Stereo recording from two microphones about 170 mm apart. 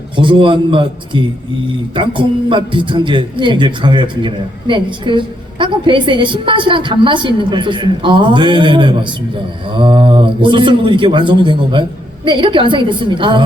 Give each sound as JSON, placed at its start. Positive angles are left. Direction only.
{"t": 0.2, "sound": "a man's voice", "side_deg": -30}